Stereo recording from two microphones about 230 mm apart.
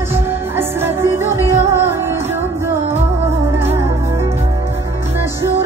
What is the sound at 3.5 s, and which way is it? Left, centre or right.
Music, centre.